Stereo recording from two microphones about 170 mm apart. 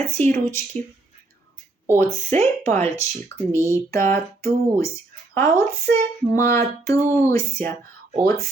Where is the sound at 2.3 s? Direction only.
40° right (ahead or behind).